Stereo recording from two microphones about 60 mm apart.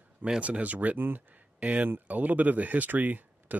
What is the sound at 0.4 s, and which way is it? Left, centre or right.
Speech, right.